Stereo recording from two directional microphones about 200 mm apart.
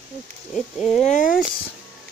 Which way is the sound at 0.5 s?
Centre (ahead or behind).